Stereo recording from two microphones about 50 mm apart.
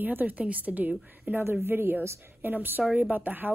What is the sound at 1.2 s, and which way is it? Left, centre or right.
A woman's voice, right.